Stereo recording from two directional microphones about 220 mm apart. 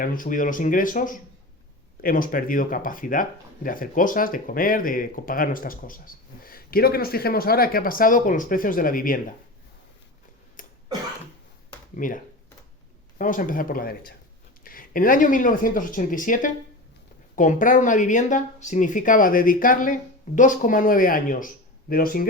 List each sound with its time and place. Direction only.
0.0 s speech: 40° left (ahead or behind)
10.6 s cough: 35° left (ahead or behind)
11.9 s speech: 35° left (ahead or behind)